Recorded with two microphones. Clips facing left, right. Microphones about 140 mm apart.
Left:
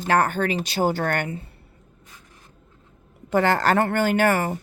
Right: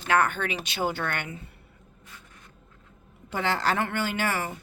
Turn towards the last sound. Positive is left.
turn(degrees=45)  # may be behind; listen again after turning